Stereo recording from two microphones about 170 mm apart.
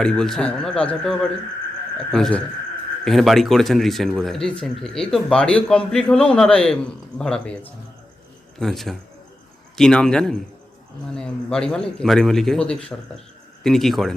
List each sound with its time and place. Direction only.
0.0 s a man's voice: 5° left (ahead or behind)